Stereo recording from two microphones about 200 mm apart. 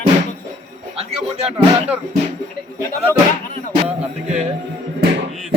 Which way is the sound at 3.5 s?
30° right (ahead or behind).